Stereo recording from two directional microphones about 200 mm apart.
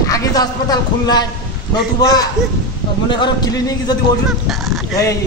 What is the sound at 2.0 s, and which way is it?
A man's voice, 20° left (ahead or behind).